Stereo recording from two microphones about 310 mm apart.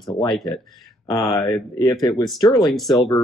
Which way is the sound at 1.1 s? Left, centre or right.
Centre.